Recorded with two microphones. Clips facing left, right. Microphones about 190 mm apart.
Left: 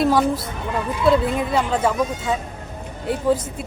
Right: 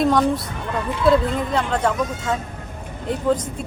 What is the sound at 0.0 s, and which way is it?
Speech, 5° left (ahead or behind).